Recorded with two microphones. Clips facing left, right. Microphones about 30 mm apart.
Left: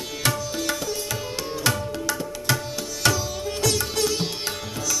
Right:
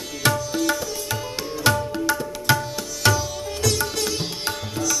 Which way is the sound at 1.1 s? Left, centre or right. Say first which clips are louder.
Right 1 dB; centre.